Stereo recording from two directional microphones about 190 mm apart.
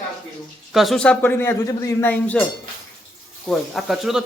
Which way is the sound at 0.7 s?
Centre (ahead or behind).